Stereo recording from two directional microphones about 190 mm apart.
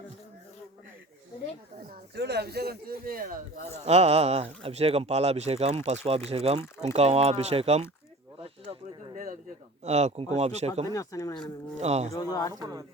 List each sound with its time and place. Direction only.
1.9 s speech: 60° right (ahead or behind)
3.8 s speech: 35° right (ahead or behind)
9.1 s a sound: 45° right (ahead or behind)
9.8 s speech: 35° right (ahead or behind)
10.8 s speech: 15° left (ahead or behind)
11.8 s speech: 35° right (ahead or behind)
12.1 s speech: 20° left (ahead or behind)
12.5 s speech: 20° right (ahead or behind)